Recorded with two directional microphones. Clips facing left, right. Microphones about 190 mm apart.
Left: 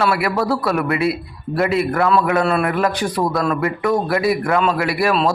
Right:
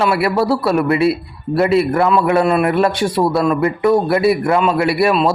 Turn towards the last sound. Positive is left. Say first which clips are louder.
# right 4 dB
turn(degrees=-25)  # may be behind; listen again after turning